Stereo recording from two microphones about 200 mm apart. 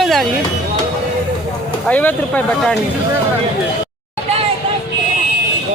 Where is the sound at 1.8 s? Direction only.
10° left (ahead or behind).